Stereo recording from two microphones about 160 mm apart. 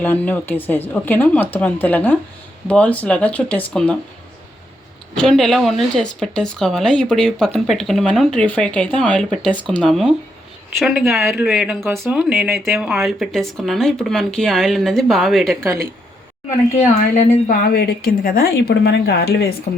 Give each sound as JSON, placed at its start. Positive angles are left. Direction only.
{"t": 0.0, "sound": "speech", "side_deg": 10}
{"t": 5.1, "sound": "speech", "side_deg": 5}
{"t": 15.6, "sound": "speech", "side_deg": -15}
{"t": 16.7, "sound": "a woman's voice", "side_deg": 45}
{"t": 17.5, "sound": "a woman's voice", "side_deg": 65}